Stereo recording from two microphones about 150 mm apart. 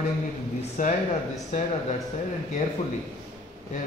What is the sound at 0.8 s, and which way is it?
Speech, 60° left (ahead or behind).